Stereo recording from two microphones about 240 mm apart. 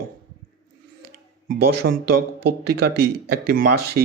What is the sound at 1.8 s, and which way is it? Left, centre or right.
Speech, right.